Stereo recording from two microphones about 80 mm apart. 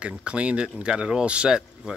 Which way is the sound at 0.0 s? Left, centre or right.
Centre.